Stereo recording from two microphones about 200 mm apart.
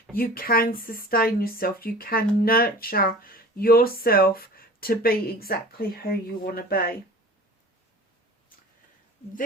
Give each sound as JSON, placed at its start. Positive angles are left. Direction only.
{"t": 0.2, "sound": "speech", "side_deg": 45}